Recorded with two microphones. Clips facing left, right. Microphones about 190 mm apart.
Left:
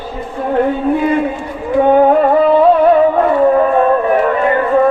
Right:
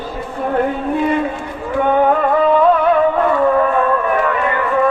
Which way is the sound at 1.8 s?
30° left (ahead or behind).